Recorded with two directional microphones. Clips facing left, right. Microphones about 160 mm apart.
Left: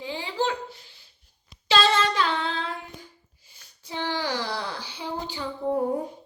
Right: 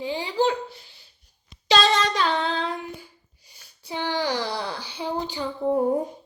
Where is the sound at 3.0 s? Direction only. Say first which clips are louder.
Even; 15° right (ahead or behind).